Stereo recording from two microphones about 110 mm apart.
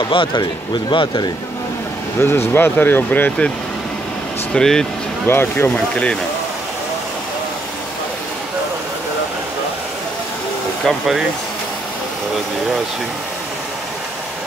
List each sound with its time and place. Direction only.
0.0 s speech: 50° left (ahead or behind)
2.2 s speech: 20° left (ahead or behind)
4.6 s speech: 5° left (ahead or behind)
5.2 s speech: 20° left (ahead or behind)
10.9 s speech: centre (ahead or behind)